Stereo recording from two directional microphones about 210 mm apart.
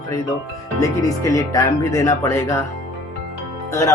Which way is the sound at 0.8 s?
15° left (ahead or behind).